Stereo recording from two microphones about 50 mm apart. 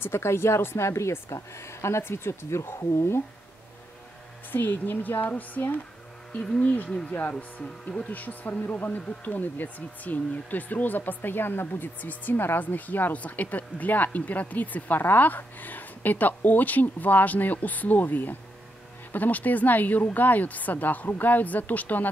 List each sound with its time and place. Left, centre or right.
0.0 s speech: left
4.5 s a woman's voice: left
7.3 s speech: left
8.1 s a woman's voice: left